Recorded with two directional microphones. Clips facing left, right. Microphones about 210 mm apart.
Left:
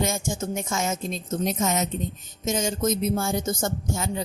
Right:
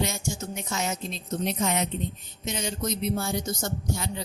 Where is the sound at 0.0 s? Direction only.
50° left (ahead or behind).